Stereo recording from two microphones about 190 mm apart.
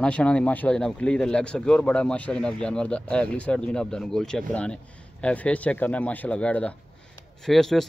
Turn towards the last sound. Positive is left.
turn(degrees=0)  # may be behind; listen again after turning